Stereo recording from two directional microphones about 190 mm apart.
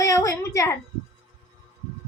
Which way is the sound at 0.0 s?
15° left (ahead or behind).